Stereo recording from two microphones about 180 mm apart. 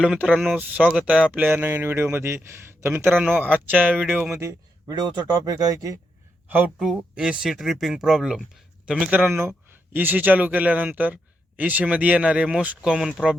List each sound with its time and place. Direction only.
0.0 s speech: 5° right (ahead or behind)
4.4 s speech: 20° right (ahead or behind)
6.5 s speech: 5° right (ahead or behind)